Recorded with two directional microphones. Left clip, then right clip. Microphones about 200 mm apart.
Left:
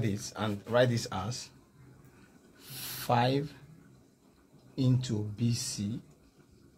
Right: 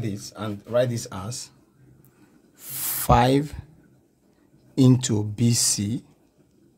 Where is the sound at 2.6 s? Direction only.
45° right (ahead or behind).